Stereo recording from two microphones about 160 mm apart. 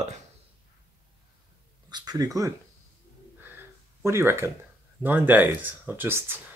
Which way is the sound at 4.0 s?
15° right (ahead or behind).